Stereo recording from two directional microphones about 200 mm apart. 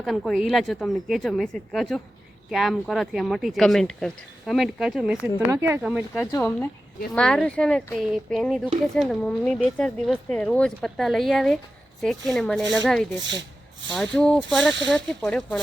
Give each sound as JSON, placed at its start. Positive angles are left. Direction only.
{"t": 0.0, "sound": "speech", "side_deg": 0}
{"t": 5.8, "sound": "speech", "side_deg": 0}
{"t": 6.3, "sound": "speech", "side_deg": 15}